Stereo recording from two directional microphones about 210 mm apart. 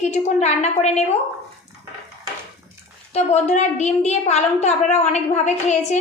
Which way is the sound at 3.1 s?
30° left (ahead or behind).